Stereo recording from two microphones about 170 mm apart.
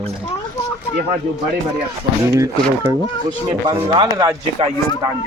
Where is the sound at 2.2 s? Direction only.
20° right (ahead or behind).